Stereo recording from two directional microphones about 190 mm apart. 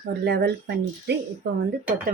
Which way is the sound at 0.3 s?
55° right (ahead or behind).